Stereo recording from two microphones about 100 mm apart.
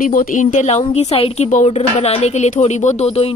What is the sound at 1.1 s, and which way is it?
A woman's voice, 80° left.